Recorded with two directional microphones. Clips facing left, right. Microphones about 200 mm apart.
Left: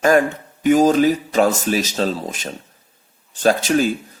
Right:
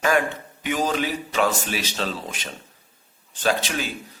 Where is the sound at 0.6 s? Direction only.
45° left (ahead or behind).